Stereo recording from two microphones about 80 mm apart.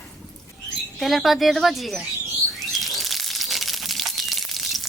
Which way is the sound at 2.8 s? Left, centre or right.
Centre.